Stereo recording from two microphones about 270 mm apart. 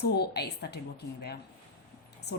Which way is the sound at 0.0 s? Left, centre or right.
Left.